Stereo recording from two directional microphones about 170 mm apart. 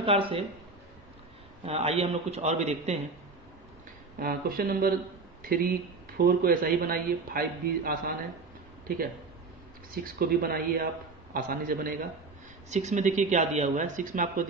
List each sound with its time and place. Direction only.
0.0 s a man's voice: 35° right (ahead or behind)
1.7 s a man's voice: 35° right (ahead or behind)
4.2 s a man's voice: 60° right (ahead or behind)
12.6 s speech: 45° right (ahead or behind)